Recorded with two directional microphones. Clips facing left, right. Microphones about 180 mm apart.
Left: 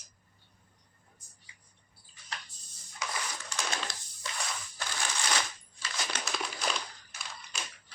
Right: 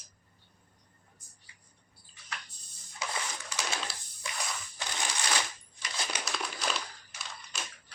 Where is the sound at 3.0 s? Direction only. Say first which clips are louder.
Even; 30° right (ahead or behind).